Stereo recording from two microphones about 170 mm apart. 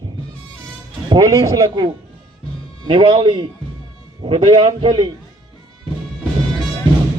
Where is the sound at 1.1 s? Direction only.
20° right (ahead or behind).